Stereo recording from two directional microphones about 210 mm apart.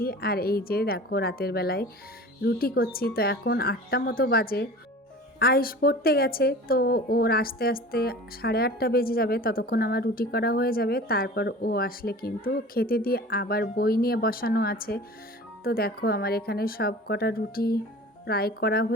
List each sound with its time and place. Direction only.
0.0 s a woman's voice: 45° left (ahead or behind)